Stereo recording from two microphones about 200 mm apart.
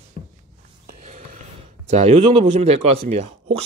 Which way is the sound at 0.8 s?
45° right (ahead or behind).